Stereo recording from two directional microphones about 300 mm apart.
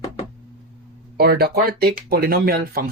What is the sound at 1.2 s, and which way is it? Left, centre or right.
Speech, right.